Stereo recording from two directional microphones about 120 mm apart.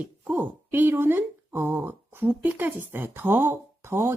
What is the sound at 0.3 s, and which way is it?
Speech, 15° right (ahead or behind).